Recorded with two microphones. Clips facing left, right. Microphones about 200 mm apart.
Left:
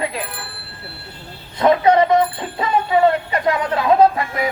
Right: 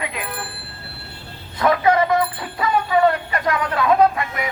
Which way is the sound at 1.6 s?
25° left (ahead or behind).